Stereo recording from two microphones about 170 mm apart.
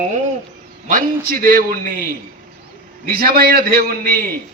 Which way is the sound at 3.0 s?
60° right (ahead or behind).